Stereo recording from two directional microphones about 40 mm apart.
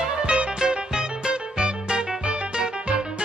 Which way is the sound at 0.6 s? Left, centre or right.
Centre.